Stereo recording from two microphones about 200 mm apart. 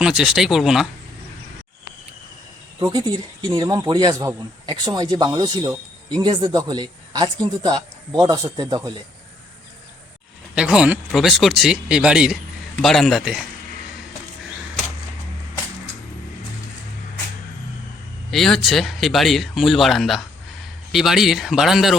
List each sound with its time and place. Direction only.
0.0 s speech: 5° right (ahead or behind)
2.8 s speech: 20° right (ahead or behind)
10.5 s speech: 5° right (ahead or behind)
18.3 s speech: centre (ahead or behind)